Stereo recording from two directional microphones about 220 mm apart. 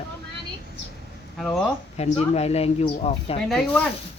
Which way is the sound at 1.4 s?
Centre (ahead or behind).